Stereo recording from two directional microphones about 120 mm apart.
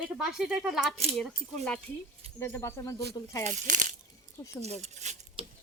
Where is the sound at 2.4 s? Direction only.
20° left (ahead or behind).